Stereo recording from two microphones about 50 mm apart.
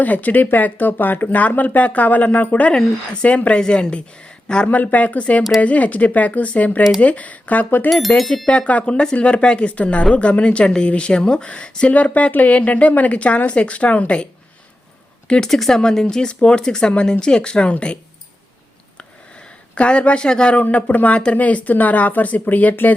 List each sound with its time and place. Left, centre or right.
0.0 s speech: left
2.7 s speech: centre
3.2 s speech: left
4.6 s speech: left
11.9 s speech: left
15.4 s speech: centre; by 17.9 s left
19.7 s speech: left